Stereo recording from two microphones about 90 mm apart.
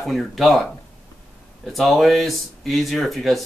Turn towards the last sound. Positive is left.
turn(degrees=0)  # may be behind; listen again after turning